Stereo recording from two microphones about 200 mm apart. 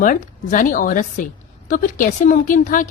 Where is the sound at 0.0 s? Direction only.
40° left (ahead or behind).